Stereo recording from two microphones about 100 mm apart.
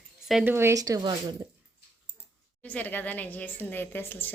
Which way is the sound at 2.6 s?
15° left (ahead or behind).